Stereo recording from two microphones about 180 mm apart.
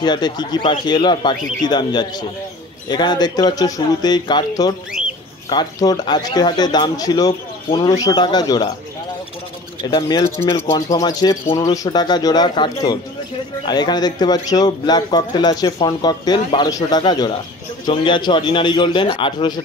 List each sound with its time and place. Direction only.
0.0 s speech: 25° left (ahead or behind)
9.8 s speech: 25° left (ahead or behind)